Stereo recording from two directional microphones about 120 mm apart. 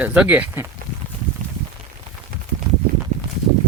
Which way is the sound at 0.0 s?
10° right (ahead or behind).